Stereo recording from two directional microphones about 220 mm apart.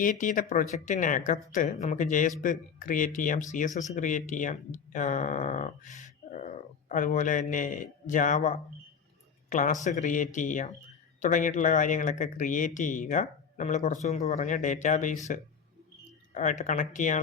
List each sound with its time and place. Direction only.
0.0 s speech: 35° left (ahead or behind)
16.3 s speech: 35° left (ahead or behind)